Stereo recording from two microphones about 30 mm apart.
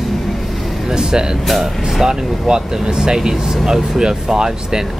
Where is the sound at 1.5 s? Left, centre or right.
Centre.